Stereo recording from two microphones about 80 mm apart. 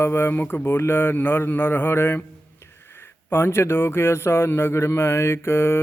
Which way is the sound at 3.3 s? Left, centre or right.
Left.